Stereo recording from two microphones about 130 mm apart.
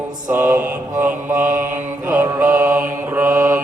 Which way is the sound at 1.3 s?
90° right.